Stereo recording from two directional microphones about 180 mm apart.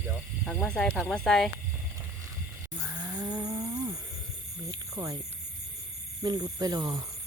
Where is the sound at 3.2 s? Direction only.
20° right (ahead or behind).